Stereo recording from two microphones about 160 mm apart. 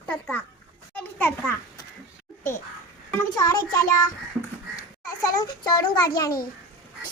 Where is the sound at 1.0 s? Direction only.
10° left (ahead or behind).